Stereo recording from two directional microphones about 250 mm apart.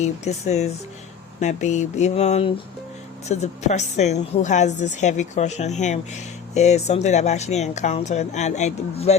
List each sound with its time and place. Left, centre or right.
0.0 s a woman's voice: left